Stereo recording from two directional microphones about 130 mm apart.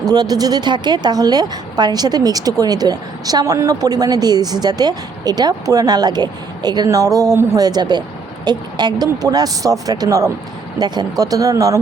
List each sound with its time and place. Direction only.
0.0 s a woman's voice: 30° right (ahead or behind)